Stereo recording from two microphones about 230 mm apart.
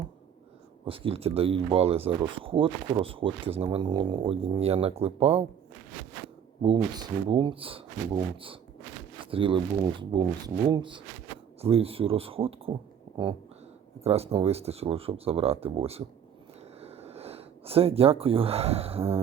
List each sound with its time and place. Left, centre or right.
0.9 s speech: right
6.6 s speech: centre
14.0 s speech: right